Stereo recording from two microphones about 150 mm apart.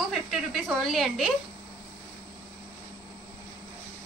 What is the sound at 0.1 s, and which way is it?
A woman's voice, centre (ahead or behind).